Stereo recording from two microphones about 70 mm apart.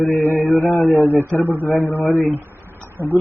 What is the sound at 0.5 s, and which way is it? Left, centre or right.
Speech, left.